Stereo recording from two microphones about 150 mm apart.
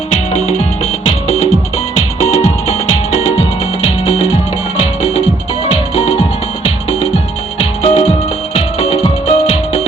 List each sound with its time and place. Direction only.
1.0 s music: 45° left (ahead or behind)
3.8 s music: 40° left (ahead or behind)
5.6 s music: 40° left (ahead or behind)
7.6 s music: 45° left (ahead or behind)